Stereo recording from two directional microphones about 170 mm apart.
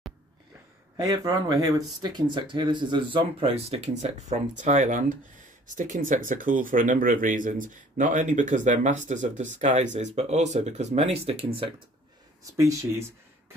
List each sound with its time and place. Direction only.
0.9 s speech: 20° right (ahead or behind)